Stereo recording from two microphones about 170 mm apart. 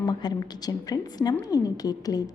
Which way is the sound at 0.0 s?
25° left (ahead or behind).